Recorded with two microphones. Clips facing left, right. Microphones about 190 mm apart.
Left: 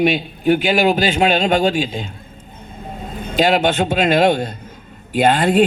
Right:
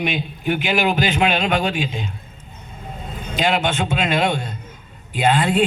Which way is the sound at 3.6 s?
55° left (ahead or behind).